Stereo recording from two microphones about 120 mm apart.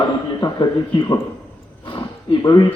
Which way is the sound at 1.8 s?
45° left (ahead or behind).